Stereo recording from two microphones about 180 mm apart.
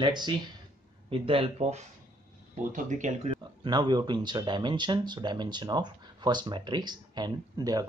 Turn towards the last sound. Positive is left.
turn(degrees=-20)  # may be behind; listen again after turning